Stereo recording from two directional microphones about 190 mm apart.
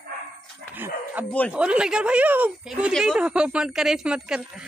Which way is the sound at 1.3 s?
10° left (ahead or behind).